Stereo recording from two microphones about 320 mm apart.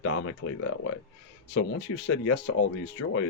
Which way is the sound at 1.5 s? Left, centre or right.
Left.